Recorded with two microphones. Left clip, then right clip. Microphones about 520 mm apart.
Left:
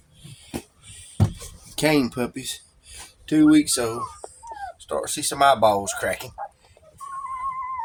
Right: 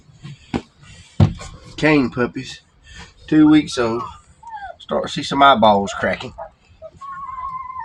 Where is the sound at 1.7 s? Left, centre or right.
Left.